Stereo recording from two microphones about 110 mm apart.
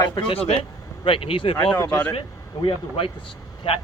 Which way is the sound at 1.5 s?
20° left (ahead or behind).